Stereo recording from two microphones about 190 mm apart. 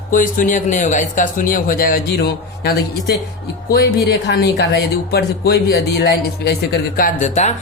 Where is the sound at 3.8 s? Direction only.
60° left (ahead or behind).